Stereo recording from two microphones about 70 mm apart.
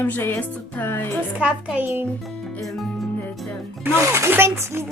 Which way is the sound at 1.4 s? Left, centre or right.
Centre.